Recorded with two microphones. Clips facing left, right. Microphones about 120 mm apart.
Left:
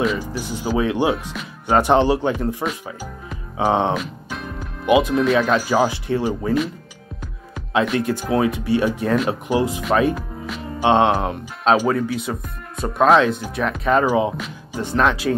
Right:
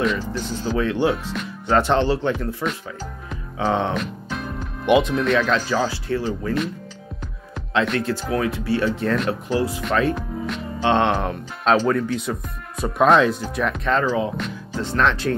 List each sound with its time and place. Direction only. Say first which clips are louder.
0.2 s speech: even; 10° left (ahead or behind)
2.6 s speech: right 3 dB; 35° left (ahead or behind)
3.5 s speech: left 3 dB; 20° left (ahead or behind)
3.9 s speech: left 1 dB; centre (ahead or behind); by 6.5 s 15° left (ahead or behind)
7.5 s speech: left 2 dB; 5° left (ahead or behind)
9.9 s music: left 2 dB; 10° left (ahead or behind)
10.9 s speech: left 3 dB; 10° left (ahead or behind)